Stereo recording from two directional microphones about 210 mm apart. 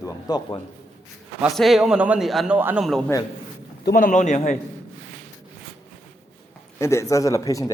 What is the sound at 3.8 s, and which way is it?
Speech, 40° left (ahead or behind).